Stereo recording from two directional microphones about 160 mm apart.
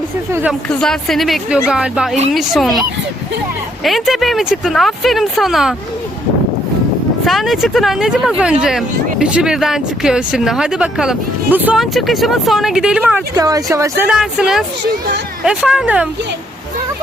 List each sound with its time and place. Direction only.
0.7 s speech: 5° left (ahead or behind)
3.8 s speech: centre (ahead or behind)
7.3 s speech: centre (ahead or behind)
13.3 s speech: 20° right (ahead or behind)
14.2 s speech: 5° right (ahead or behind)